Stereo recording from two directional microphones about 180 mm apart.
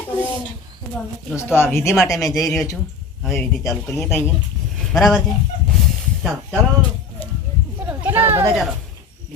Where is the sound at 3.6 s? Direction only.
15° left (ahead or behind).